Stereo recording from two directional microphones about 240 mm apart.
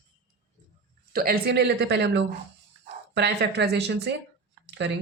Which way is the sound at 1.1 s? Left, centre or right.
Right.